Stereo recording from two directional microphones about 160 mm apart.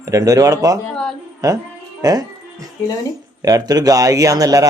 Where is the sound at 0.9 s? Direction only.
5° left (ahead or behind).